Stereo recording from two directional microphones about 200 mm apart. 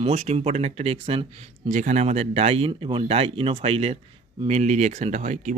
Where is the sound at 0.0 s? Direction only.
35° right (ahead or behind).